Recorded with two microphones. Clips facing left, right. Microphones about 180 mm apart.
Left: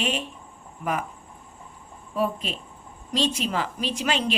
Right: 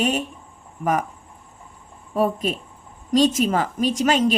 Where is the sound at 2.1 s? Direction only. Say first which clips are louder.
Right 5 dB; 45° right (ahead or behind).